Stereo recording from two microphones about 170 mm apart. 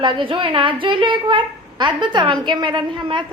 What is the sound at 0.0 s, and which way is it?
A woman's voice, 30° right (ahead or behind).